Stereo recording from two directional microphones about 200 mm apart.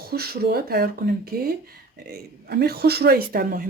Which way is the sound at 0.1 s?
50° right (ahead or behind).